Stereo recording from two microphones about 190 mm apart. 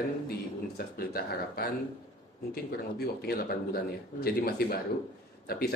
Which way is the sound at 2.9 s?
55° left (ahead or behind).